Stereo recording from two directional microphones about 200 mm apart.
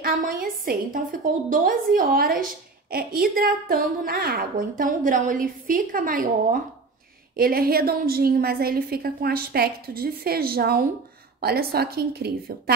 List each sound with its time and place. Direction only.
0.0 s a woman's voice: 45° right (ahead or behind)